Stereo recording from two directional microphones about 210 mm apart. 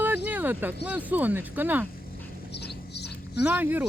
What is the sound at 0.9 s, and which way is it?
Speech, 5° right (ahead or behind).